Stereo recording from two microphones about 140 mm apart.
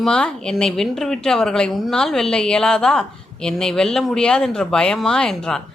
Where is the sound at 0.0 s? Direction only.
5° left (ahead or behind).